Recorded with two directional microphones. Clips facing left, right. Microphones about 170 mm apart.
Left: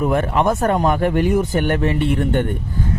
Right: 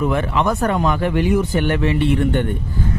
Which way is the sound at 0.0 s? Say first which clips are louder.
Left 1 dB; 45° left (ahead or behind).